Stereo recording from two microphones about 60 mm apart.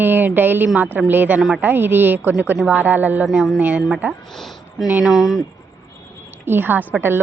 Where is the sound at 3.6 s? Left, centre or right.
Right.